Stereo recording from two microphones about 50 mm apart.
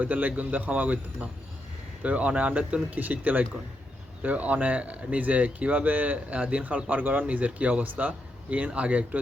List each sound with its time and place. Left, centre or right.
0.0 s speech: right